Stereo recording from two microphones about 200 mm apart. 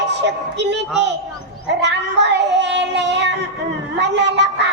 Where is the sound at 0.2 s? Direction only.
60° right (ahead or behind).